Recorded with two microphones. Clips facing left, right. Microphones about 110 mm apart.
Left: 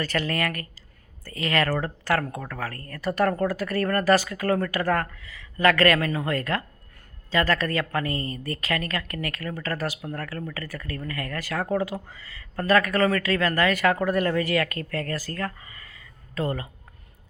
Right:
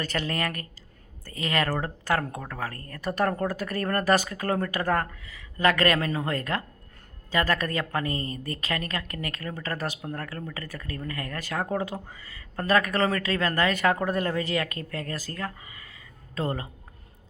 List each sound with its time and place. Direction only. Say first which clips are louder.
0.0 s a woman's voice: left 3 dB; 20° right (ahead or behind)